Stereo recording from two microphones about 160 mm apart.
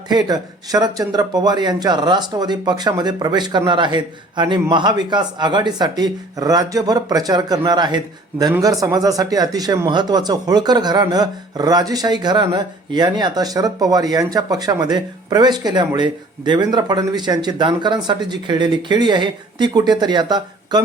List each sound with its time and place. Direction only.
0.1 s speech: 25° right (ahead or behind)